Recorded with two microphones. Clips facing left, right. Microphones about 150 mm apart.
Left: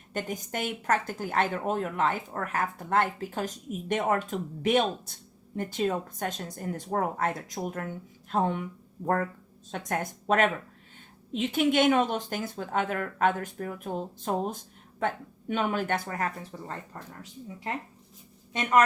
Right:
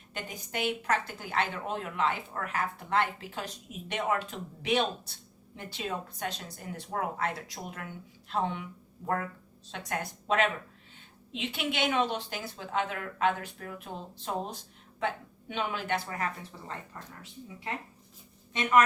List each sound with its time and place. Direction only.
0.1 s speech: 45° left (ahead or behind)